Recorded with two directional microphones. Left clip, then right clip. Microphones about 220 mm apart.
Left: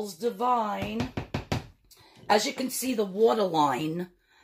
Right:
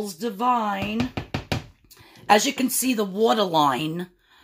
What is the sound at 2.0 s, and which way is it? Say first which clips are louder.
A woman's voice: right 6 dB; 50° right (ahead or behind).